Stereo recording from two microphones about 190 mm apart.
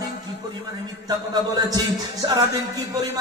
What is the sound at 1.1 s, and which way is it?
Music, 20° right (ahead or behind).